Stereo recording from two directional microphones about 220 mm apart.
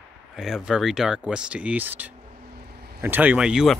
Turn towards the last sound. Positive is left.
turn(degrees=-5)  # may be behind; listen again after turning